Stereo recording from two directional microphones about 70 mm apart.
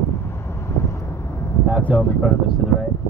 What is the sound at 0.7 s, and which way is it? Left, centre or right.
Vehicle, left.